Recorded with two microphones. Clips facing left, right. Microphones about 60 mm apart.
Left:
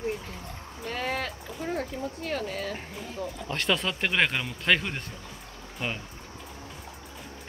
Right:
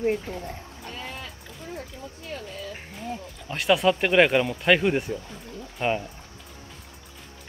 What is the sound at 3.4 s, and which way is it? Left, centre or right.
Speech, centre.